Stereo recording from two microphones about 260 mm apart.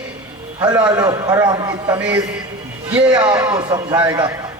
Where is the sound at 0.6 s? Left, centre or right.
Centre.